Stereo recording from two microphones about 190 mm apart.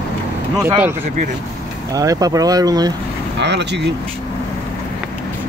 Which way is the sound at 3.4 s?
65° right (ahead or behind).